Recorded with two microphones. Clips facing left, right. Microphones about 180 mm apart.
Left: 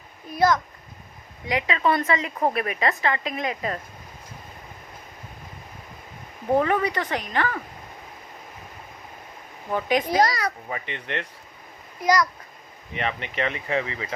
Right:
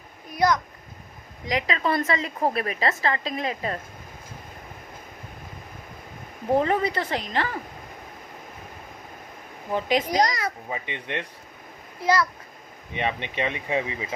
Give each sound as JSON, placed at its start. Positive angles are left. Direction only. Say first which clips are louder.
{"t": 0.3, "sound": "a sound", "louder": "left 1 dB", "side_deg": -20}
{"t": 1.5, "sound": "a woman's voice", "louder": "left 2 dB", "side_deg": -35}
{"t": 6.6, "sound": "speech", "louder": "left 1 dB", "side_deg": -30}
{"t": 10.2, "sound": "a child's voice", "louder": "left 2 dB", "side_deg": -20}
{"t": 12.0, "sound": "a child's voice", "louder": "left 1 dB", "side_deg": -30}